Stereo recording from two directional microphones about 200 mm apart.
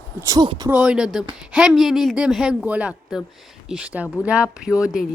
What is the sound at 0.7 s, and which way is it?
A woman's voice, 5° right (ahead or behind).